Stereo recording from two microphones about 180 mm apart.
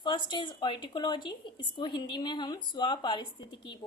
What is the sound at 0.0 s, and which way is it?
A woman's voice, 25° left (ahead or behind).